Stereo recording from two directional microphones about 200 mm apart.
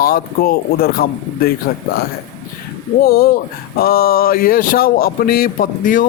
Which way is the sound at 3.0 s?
50° left (ahead or behind).